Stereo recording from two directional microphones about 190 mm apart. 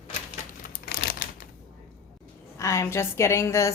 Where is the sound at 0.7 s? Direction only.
55° left (ahead or behind).